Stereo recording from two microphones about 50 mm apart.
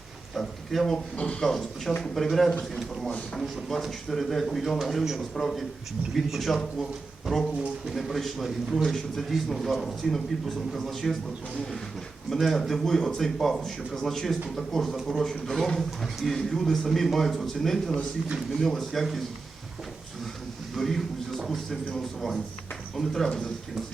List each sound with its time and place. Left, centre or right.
0.3 s speech: centre
1.1 s speech: left
1.4 s a man's voice: centre
7.9 s a man's voice: centre
12.3 s a man's voice: centre
20.7 s a sound: centre
21.9 s a man's voice: centre